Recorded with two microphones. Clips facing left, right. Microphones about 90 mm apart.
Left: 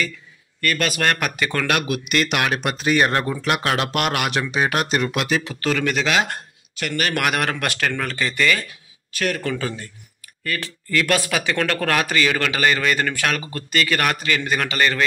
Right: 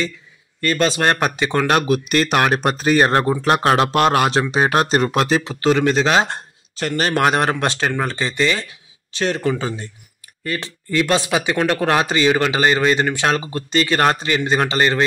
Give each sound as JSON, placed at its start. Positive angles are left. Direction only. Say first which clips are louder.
{"t": 0.6, "sound": "speech", "louder": "right 4 dB", "side_deg": -25}